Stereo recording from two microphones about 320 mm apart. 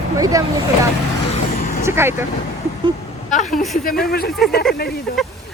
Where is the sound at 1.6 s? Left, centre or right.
Left.